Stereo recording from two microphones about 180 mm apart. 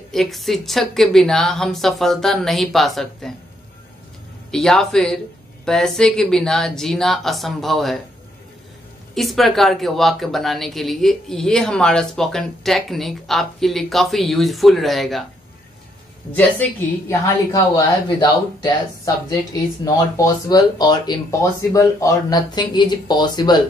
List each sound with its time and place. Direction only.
0.1 s speech: centre (ahead or behind)
4.5 s speech: 5° left (ahead or behind)
9.1 s speech: centre (ahead or behind)
16.3 s a woman's voice: 10° left (ahead or behind)
17.5 s speech: 20° left (ahead or behind)